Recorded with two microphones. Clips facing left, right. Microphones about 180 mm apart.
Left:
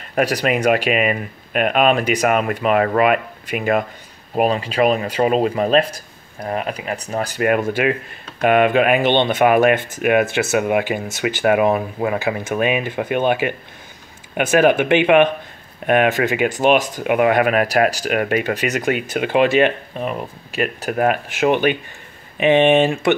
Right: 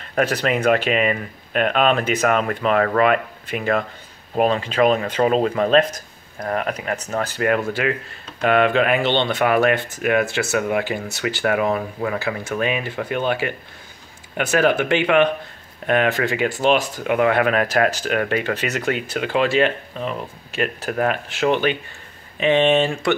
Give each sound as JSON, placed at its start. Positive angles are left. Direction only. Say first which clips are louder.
{"t": 0.1, "sound": "speech", "louder": "left 2 dB", "side_deg": 15}